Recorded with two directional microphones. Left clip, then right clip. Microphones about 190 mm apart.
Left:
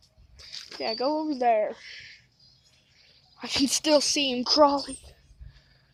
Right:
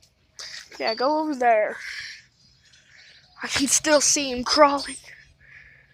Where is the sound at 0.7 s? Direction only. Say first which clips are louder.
Right 5 dB; 10° left (ahead or behind).